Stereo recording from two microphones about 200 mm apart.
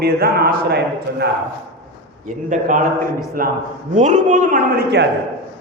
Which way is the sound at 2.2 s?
40° right (ahead or behind).